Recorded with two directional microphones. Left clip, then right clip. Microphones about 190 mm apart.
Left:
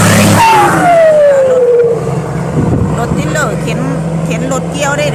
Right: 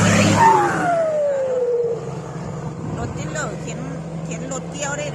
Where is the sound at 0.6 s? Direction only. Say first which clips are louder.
Left 12 dB; 40° left (ahead or behind).